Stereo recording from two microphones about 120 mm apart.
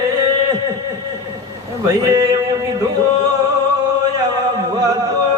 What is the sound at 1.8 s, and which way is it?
Speech, 30° right (ahead or behind).